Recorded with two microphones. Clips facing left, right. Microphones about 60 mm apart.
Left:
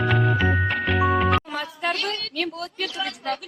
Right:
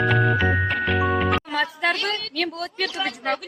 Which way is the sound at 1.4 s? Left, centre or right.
Right.